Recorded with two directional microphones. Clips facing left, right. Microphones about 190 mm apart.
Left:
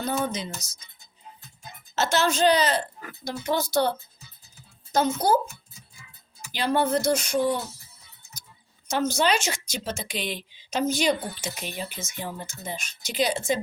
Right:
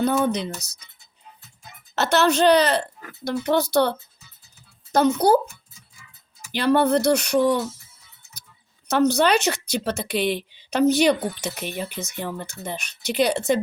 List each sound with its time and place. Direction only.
0.0 s a woman's voice: 60° right (ahead or behind)
2.0 s a woman's voice: 60° right (ahead or behind)
6.5 s a woman's voice: 60° right (ahead or behind)
8.9 s a woman's voice: 60° right (ahead or behind)